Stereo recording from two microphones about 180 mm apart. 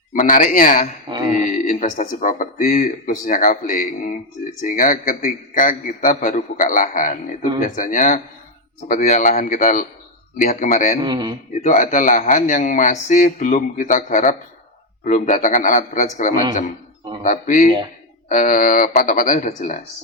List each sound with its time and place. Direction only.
0.1 s a man's voice: 50° left (ahead or behind)
11.0 s a man's voice: 25° right (ahead or behind)
11.6 s a man's voice: 45° left (ahead or behind)